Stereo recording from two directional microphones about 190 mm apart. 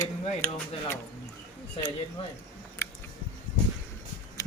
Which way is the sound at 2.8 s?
15° left (ahead or behind).